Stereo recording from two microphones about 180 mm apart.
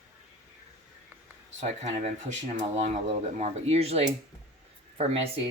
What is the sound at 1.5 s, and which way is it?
Speech, 40° right (ahead or behind).